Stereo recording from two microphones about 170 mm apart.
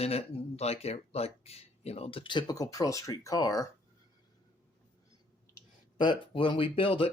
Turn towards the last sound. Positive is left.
turn(degrees=30)  # may be behind; listen again after turning